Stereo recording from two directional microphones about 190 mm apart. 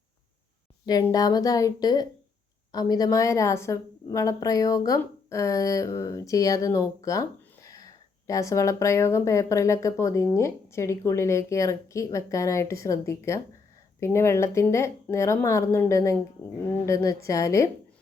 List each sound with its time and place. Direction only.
1.0 s a woman's voice: 20° left (ahead or behind)